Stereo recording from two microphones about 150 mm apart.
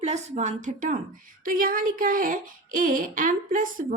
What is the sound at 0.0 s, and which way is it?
Speech, 50° right (ahead or behind).